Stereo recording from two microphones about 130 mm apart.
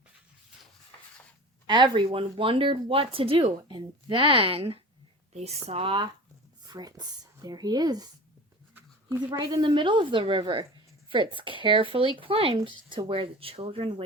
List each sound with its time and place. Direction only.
1.6 s speech: 35° right (ahead or behind)
6.7 s speech: 30° right (ahead or behind)
8.7 s a sound: 20° right (ahead or behind)
9.4 s speech: 30° right (ahead or behind)